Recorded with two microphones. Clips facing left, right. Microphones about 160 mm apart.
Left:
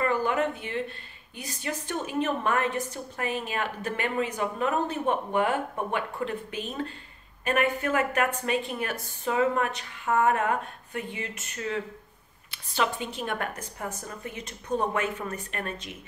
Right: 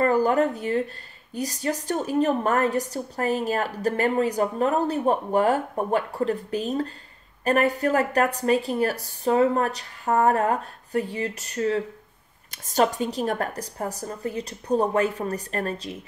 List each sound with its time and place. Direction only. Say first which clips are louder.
0.0 s speech: right 6 dB; 40° right (ahead or behind)